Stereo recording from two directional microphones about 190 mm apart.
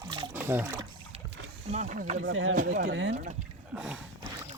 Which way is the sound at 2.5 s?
45° right (ahead or behind).